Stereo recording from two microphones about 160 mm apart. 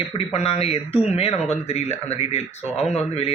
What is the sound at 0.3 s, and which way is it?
Speech, 40° left (ahead or behind).